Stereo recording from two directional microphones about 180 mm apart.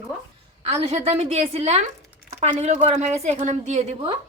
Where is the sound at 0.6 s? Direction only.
35° right (ahead or behind).